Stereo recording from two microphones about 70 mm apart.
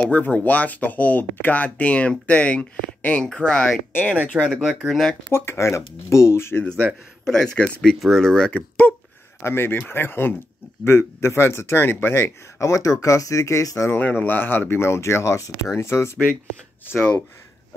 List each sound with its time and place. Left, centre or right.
0.0 s speech: left
4.4 s speech: centre
5.3 s speech: left
7.2 s speech: centre
8.5 s speech: left
9.4 s speech: left
12.6 s speech: left
13.9 s speech: left